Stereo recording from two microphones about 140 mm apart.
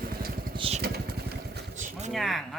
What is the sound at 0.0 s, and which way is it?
Vehicle, 90° right.